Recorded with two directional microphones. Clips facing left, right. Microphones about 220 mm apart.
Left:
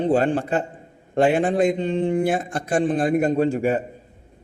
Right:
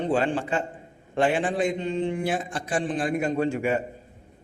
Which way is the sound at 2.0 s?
50° left (ahead or behind).